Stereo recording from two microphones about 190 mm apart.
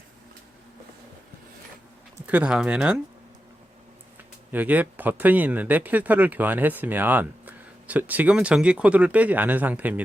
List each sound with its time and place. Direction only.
2.2 s speech: 5° right (ahead or behind)
4.5 s speech: 10° right (ahead or behind)